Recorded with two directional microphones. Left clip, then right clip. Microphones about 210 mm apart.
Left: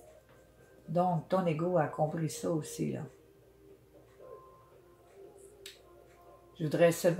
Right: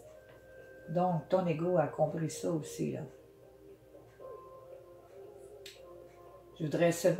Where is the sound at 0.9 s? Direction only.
35° left (ahead or behind).